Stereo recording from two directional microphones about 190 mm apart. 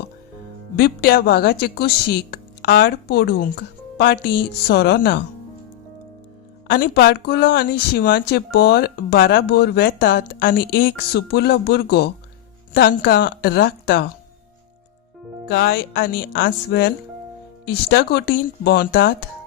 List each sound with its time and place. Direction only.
0.8 s speech: 55° left (ahead or behind)
6.7 s a woman's voice: 55° left (ahead or behind)
15.4 s speech: 60° left (ahead or behind)
18.4 s a woman's voice: 50° left (ahead or behind)